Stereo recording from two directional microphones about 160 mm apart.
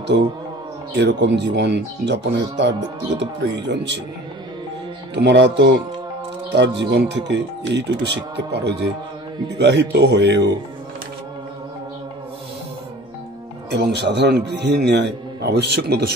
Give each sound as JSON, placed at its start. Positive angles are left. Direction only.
{"t": 0.9, "sound": "speech", "side_deg": -90}
{"t": 5.1, "sound": "speech", "side_deg": -90}
{"t": 6.8, "sound": "speech", "side_deg": -90}
{"t": 13.7, "sound": "speech", "side_deg": -90}